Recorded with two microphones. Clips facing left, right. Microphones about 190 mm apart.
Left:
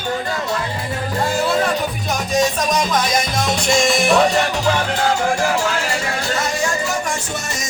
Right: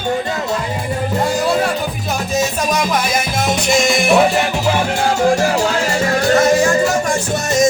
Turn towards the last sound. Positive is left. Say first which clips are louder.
# right 5 dB
turn(degrees=-40)  # may be behind; listen again after turning